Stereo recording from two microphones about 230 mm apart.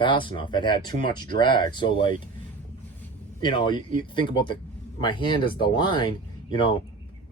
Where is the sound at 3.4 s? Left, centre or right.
Centre.